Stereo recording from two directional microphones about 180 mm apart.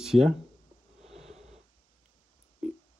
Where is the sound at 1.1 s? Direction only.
35° right (ahead or behind).